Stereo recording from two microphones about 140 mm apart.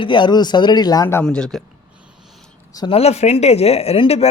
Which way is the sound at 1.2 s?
5° left (ahead or behind).